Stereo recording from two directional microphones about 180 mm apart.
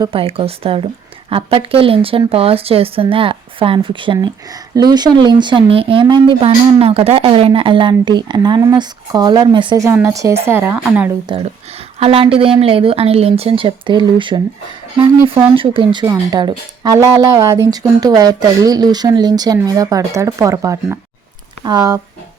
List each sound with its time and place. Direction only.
0.0 s speech: 30° right (ahead or behind)
9.8 s speech: 15° right (ahead or behind)
11.3 s speech: 30° right (ahead or behind)
15.5 s speech: 30° right (ahead or behind)